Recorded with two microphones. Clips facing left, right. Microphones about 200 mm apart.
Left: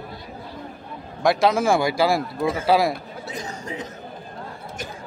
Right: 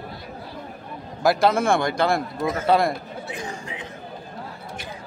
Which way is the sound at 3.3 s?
40° left (ahead or behind).